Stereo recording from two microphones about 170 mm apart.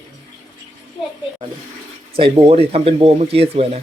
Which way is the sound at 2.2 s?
30° right (ahead or behind).